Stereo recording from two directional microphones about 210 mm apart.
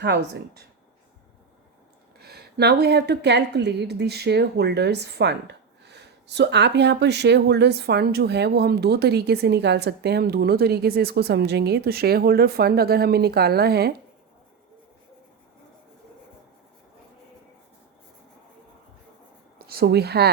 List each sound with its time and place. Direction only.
0.0 s a woman's voice: 50° right (ahead or behind)
2.2 s a woman's voice: 50° right (ahead or behind)
19.5 s speech: 45° right (ahead or behind)